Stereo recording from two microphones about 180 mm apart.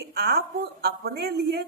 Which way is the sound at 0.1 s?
60° right (ahead or behind).